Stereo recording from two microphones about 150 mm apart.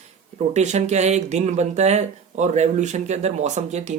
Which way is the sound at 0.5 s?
50° right (ahead or behind).